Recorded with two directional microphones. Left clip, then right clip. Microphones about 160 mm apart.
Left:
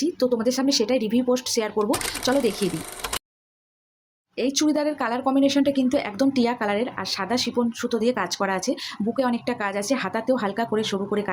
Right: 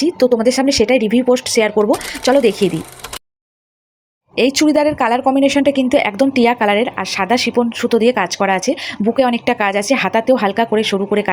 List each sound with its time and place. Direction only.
0.2 s a woman's voice: 25° right (ahead or behind)
1.8 s speech: centre (ahead or behind)
2.4 s a woman's voice: 20° right (ahead or behind)
2.6 s printer: centre (ahead or behind)
4.4 s a woman's voice: 30° right (ahead or behind)